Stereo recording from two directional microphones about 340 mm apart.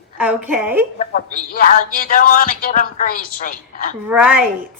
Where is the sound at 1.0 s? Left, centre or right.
Left.